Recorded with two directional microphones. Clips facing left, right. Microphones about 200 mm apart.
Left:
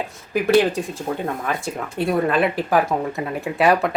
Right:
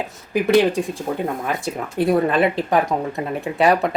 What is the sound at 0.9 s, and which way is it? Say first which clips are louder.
Speech: right 1 dB; 15° right (ahead or behind).